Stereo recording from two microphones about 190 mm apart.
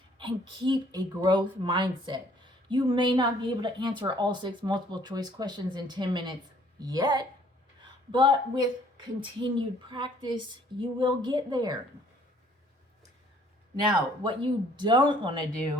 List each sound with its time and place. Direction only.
0.2 s a woman's voice: 25° right (ahead or behind)
13.8 s a woman's voice: 25° right (ahead or behind)